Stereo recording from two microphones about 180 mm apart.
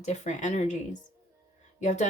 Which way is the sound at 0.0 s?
40° left (ahead or behind).